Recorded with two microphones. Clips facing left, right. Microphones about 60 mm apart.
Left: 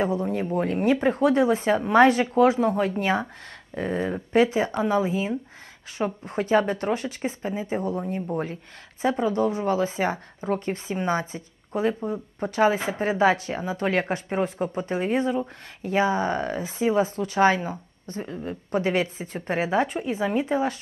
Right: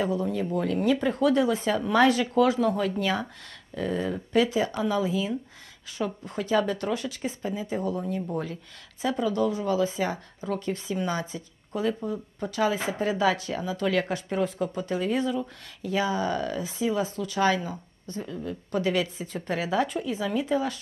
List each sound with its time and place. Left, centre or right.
0.0 s speech: left